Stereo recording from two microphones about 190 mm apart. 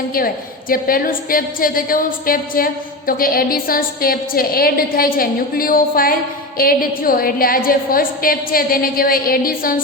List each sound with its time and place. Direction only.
0.7 s a woman's voice: 50° left (ahead or behind)